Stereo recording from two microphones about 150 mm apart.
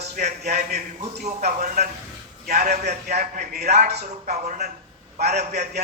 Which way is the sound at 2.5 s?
80° right.